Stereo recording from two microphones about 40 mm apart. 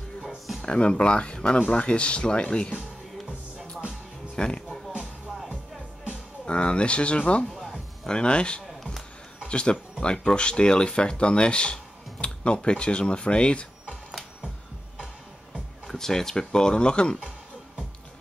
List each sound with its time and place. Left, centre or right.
0.6 s speech: left
4.4 s music: left
6.4 s speech: left
7.4 s music: centre
8.1 s speech: left
15.9 s speech: centre